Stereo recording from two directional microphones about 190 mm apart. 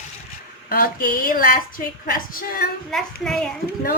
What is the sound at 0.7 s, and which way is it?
A woman's voice, 50° left (ahead or behind).